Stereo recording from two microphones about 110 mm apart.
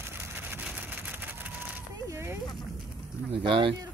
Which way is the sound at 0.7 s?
15° right (ahead or behind).